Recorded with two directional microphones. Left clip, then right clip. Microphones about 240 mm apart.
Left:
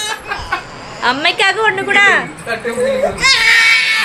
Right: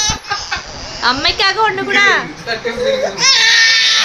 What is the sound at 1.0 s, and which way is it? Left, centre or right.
A woman's voice, centre.